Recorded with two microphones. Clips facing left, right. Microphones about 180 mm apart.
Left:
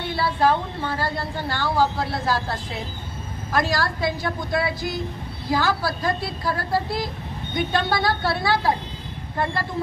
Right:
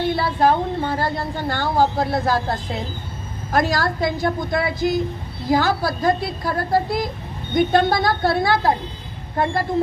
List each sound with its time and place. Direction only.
0.0 s speech: 45° right (ahead or behind)
3.5 s speech: 50° right (ahead or behind)